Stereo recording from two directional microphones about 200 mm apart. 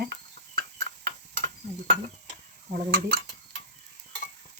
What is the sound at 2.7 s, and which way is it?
Cutlery, 55° right (ahead or behind).